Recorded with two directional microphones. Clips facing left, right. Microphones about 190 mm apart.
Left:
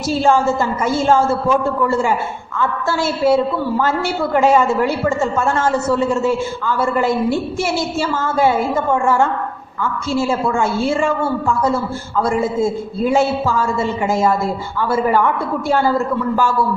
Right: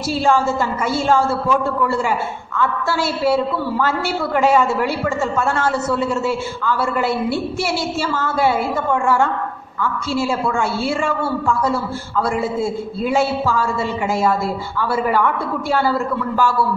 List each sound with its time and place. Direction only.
0.8 s a woman's voice: 45° left (ahead or behind)
14.9 s a woman's voice: 45° left (ahead or behind)